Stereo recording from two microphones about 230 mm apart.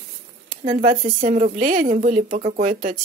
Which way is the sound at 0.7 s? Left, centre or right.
Right.